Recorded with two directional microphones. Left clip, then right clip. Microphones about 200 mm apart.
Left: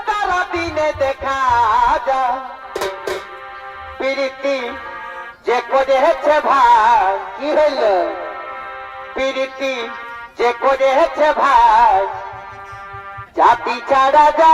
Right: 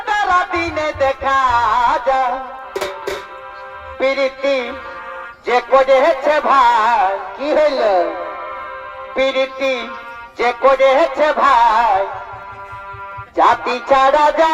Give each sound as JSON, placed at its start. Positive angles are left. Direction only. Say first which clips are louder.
{"t": 0.0, "sound": "music", "louder": "right 3 dB", "side_deg": -30}
{"t": 4.0, "sound": "music", "louder": "right 3 dB", "side_deg": -25}
{"t": 9.1, "sound": "music", "louder": "right 3 dB", "side_deg": -25}
{"t": 13.3, "sound": "music", "louder": "even", "side_deg": -25}